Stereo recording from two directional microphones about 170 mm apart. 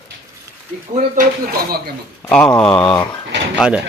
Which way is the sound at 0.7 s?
45° right (ahead or behind).